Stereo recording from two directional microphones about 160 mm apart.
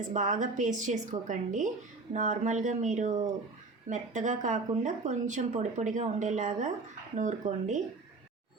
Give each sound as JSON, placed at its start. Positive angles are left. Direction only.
{"t": 0.1, "sound": "a woman's voice", "side_deg": -50}